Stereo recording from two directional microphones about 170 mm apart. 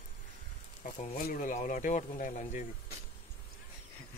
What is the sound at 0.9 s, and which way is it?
Speech, 50° left (ahead or behind).